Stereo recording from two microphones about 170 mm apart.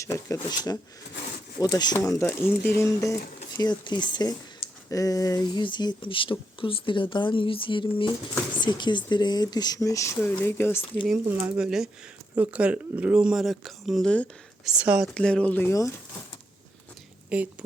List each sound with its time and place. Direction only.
0.0 s speech: 20° left (ahead or behind)
11.4 s speech: 5° right (ahead or behind)
14.8 s speech: 5° right (ahead or behind)
15.1 s speech: 5° left (ahead or behind)
17.2 s a woman's voice: 10° right (ahead or behind)